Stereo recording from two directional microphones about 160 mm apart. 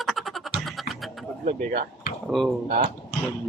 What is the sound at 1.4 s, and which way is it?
Speech, 55° right (ahead or behind).